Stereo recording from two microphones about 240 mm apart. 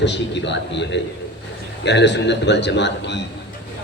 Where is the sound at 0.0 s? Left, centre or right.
Left.